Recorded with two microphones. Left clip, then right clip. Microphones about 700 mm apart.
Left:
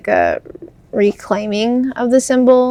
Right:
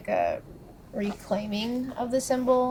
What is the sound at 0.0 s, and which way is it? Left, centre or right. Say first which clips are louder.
A woman's voice: left 12 dB; left.